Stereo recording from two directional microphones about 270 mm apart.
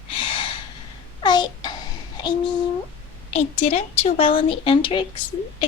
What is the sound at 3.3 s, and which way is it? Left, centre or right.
Speech, left.